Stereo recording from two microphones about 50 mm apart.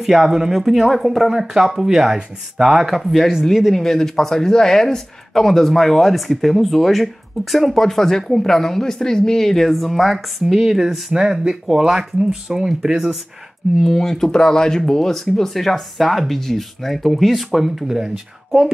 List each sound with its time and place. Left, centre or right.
0.0 s speech: centre
10.1 s speech: centre
13.8 s speech: centre